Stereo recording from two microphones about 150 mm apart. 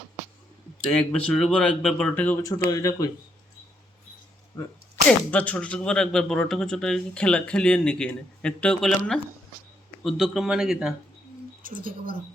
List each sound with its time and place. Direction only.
0.9 s speech: 5° left (ahead or behind); by 3.1 s 25° left (ahead or behind)
5.0 s speech: 10° left (ahead or behind)
10.0 s speech: centre (ahead or behind)
11.6 s speech: 65° right (ahead or behind)